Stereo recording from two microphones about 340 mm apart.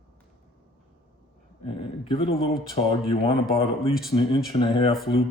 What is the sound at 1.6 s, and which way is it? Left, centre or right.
Speech, centre.